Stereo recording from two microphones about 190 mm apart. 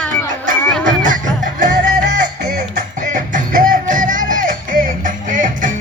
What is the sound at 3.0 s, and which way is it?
Music, 40° right (ahead or behind).